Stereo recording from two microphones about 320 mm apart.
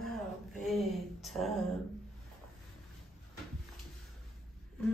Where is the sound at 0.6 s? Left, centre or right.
Centre.